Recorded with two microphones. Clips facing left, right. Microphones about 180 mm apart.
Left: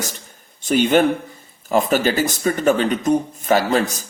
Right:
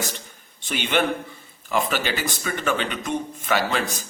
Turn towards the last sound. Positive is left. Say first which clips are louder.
# left 6 dB
turn(degrees=40)  # may be behind; listen again after turning